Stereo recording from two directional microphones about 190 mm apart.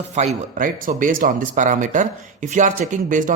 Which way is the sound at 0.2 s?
35° right (ahead or behind).